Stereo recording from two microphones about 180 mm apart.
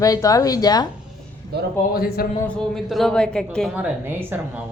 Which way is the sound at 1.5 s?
65° right (ahead or behind).